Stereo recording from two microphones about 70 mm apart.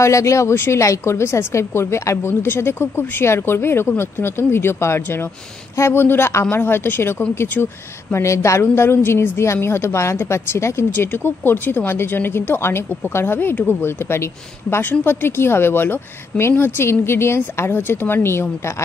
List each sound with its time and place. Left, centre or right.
0.0 s a woman's voice: left
8.1 s a woman's voice: left